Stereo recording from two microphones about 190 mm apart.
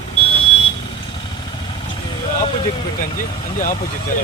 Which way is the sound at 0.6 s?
25° left (ahead or behind).